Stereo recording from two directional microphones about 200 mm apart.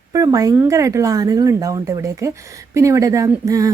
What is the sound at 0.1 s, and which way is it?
Speech, 15° right (ahead or behind).